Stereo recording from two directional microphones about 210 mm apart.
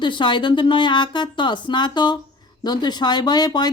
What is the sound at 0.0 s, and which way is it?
Speech, 20° left (ahead or behind).